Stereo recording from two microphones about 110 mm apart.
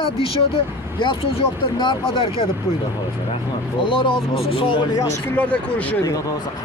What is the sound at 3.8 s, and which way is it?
Speech, 50° left (ahead or behind).